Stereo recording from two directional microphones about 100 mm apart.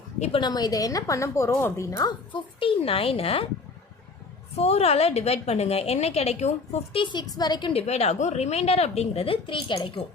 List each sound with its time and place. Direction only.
0.3 s a woman's voice: 45° left (ahead or behind)
2.0 s speech: 55° left (ahead or behind)
4.5 s a woman's voice: 90° left
7.0 s a woman's voice: 50° left (ahead or behind)
7.7 s a woman's voice: 90° left; by 9.7 s 60° left (ahead or behind)
9.7 s a woman's voice: 45° left (ahead or behind)